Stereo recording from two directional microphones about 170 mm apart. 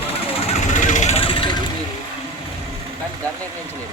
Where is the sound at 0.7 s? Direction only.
50° left (ahead or behind); by 1.6 s 30° left (ahead or behind).